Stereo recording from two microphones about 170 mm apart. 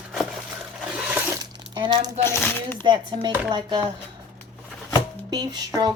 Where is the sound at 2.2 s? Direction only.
15° left (ahead or behind).